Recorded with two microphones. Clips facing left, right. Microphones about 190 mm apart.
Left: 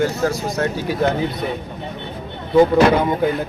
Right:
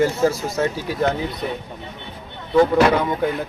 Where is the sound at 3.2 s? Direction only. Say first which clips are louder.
Left 3 dB; 5° left (ahead or behind).